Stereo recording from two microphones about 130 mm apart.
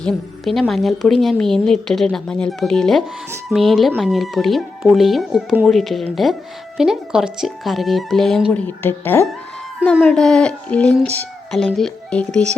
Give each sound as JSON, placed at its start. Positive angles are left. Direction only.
{"t": 0.0, "sound": "a woman's voice", "side_deg": 0}
{"t": 8.5, "sound": "a woman's voice", "side_deg": 15}